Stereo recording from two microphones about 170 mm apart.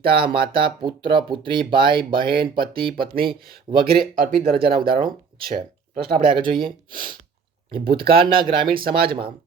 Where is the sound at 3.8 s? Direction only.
55° right (ahead or behind).